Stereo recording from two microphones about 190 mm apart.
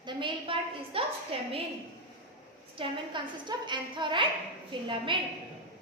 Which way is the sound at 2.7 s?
25° right (ahead or behind).